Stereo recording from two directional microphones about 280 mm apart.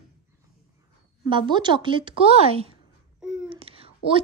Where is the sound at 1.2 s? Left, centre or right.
Centre.